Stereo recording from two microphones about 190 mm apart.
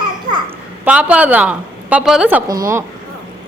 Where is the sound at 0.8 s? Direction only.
5° right (ahead or behind).